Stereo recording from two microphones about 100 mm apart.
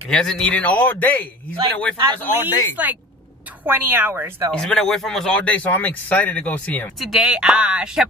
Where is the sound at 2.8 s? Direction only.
15° right (ahead or behind).